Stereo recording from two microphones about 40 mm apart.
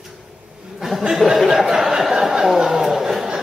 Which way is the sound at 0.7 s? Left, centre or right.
Centre.